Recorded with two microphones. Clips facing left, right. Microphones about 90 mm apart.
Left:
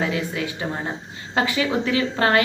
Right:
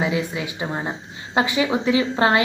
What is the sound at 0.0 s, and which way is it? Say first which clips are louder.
A woman's voice: right 1 dB; 20° right (ahead or behind).